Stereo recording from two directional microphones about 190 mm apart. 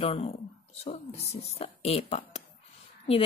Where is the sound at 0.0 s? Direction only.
30° left (ahead or behind).